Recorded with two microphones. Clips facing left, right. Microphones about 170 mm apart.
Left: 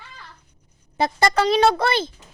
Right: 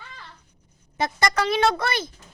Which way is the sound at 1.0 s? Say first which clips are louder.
Left 4 dB; 30° left (ahead or behind).